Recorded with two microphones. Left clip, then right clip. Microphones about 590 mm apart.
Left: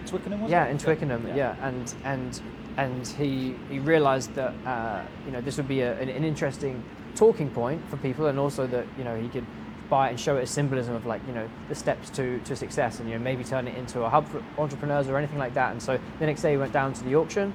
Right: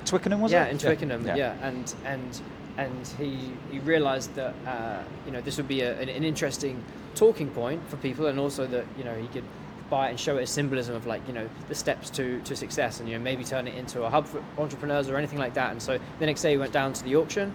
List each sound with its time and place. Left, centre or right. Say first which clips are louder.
0.1 s speech: right 6 dB; right
0.5 s speech: left 1 dB; left